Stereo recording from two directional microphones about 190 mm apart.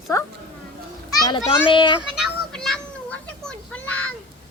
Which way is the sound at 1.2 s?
25° left (ahead or behind).